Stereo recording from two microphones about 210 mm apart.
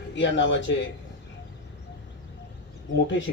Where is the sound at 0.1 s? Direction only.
60° left (ahead or behind).